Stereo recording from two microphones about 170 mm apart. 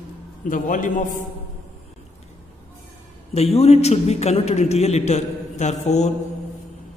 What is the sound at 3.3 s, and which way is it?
A man's voice, 35° left (ahead or behind).